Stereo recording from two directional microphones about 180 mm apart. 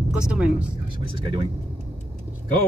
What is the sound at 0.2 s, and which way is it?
Speech, 5° right (ahead or behind).